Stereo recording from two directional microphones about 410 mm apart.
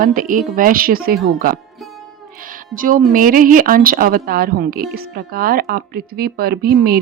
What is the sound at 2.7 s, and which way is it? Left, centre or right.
Speech, centre.